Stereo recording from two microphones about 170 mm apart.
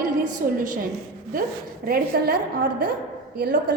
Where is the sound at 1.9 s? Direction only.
65° right (ahead or behind).